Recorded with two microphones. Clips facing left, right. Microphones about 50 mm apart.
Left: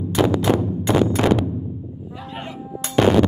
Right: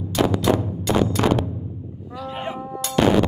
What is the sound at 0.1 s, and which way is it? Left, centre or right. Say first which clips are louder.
Music: left 1 dB; left.